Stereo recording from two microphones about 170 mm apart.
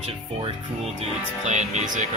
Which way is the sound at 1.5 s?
45° right (ahead or behind).